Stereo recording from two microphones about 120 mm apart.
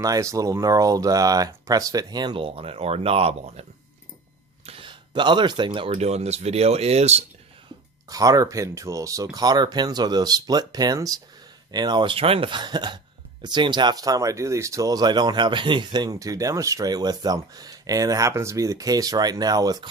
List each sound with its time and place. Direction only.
0.0 s speech: 25° right (ahead or behind); by 3.7 s 60° right (ahead or behind)
4.6 s speech: 45° right (ahead or behind); by 7.3 s 65° right (ahead or behind)
8.1 s speech: 30° right (ahead or behind)